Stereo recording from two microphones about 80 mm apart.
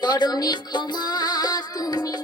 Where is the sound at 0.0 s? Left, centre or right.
Left.